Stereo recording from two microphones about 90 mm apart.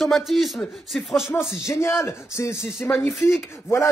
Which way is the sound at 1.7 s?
30° left (ahead or behind).